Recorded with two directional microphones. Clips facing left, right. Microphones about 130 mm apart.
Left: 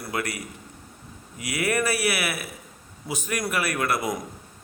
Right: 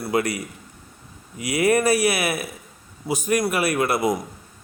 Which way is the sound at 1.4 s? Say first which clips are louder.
Right 6 dB; 15° right (ahead or behind).